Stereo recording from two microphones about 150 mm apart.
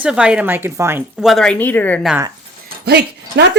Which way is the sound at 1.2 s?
Centre (ahead or behind).